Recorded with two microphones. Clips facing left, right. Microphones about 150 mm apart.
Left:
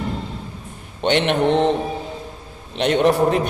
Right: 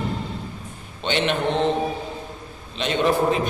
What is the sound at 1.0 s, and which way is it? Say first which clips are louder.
Speech: left 5 dB; 65° left (ahead or behind).